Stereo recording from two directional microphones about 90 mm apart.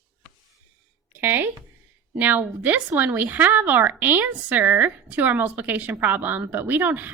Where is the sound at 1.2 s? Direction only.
25° right (ahead or behind).